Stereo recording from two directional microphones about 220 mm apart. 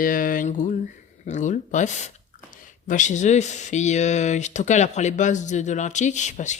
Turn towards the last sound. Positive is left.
turn(degrees=35)  # may be behind; listen again after turning